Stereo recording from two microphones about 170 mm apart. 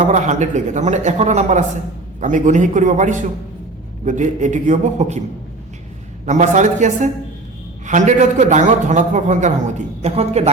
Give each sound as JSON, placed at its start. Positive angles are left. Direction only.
{"t": 0.1, "sound": "a man's voice", "side_deg": -45}
{"t": 6.2, "sound": "a man's voice", "side_deg": -45}